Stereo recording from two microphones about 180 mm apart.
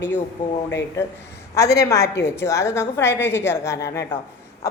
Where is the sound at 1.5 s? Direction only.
15° left (ahead or behind).